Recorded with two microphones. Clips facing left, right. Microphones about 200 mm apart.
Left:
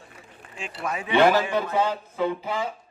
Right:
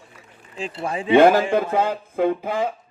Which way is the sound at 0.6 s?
30° right (ahead or behind).